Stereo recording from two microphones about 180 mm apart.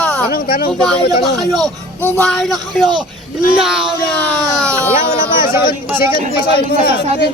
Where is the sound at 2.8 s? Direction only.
25° right (ahead or behind).